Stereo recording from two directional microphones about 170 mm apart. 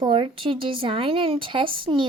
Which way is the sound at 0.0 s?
30° right (ahead or behind).